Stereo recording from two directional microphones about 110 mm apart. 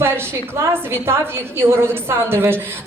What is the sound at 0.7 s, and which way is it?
A woman's voice, 20° right (ahead or behind).